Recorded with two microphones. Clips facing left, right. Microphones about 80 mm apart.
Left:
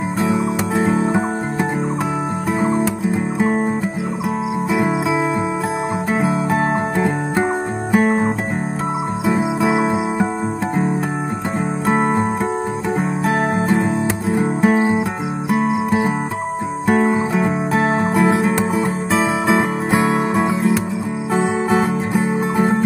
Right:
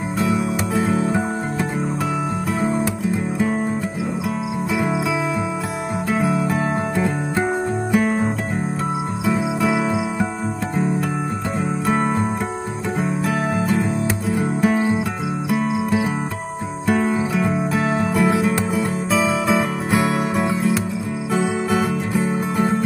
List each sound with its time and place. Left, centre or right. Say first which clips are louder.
3.4 s music: left 4 dB; left
7.9 s music: left 4 dB; left
9.7 s music: left 3 dB; left
11.9 s music: left 3 dB; left
13.6 s music: left 3 dB; left
14.3 s music: left 3 dB; left
17.7 s music: left 5 dB; left
19.5 s music: left 2 dB; left